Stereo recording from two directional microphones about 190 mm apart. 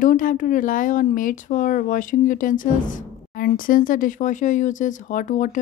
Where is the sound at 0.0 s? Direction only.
45° left (ahead or behind).